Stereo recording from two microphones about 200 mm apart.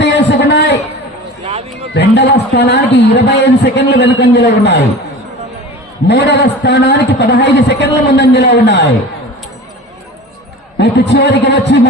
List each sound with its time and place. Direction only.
0.0 s a sound: 60° left (ahead or behind)
1.9 s a man's voice: 55° left (ahead or behind)
6.1 s a man's voice: 60° left (ahead or behind)
10.8 s a man's voice: 55° left (ahead or behind)